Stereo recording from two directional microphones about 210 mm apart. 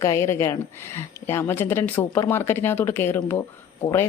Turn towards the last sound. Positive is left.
turn(degrees=10)  # may be behind; listen again after turning